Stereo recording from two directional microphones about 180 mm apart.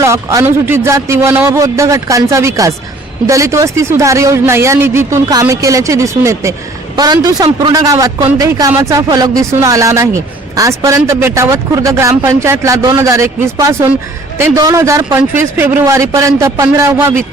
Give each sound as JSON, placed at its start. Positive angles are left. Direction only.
{"t": 0.0, "sound": "a man's voice", "side_deg": -15}